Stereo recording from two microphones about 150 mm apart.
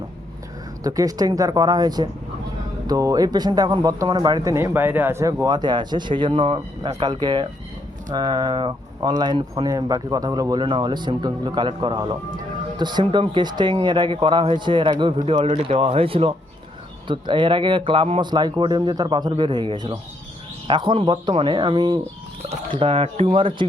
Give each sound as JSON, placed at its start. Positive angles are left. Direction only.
{"t": 0.9, "sound": "speech", "side_deg": -25}
{"t": 4.5, "sound": "speech", "side_deg": -15}
{"t": 15.4, "sound": "speech", "side_deg": -55}
{"t": 15.6, "sound": "speech", "side_deg": -35}